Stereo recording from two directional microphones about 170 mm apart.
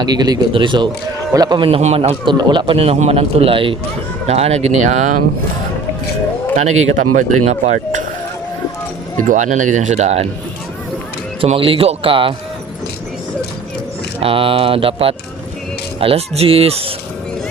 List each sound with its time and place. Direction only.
0.0 s a man's voice: 25° right (ahead or behind); by 5.1 s 45° right (ahead or behind)
6.7 s speech: 45° right (ahead or behind)
9.2 s speech: 50° right (ahead or behind)
11.3 s a man's voice: 30° right (ahead or behind)
14.2 s a man's voice: 30° right (ahead or behind)